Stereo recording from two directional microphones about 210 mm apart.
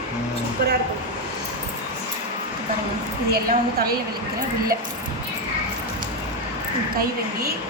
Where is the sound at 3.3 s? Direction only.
45° right (ahead or behind).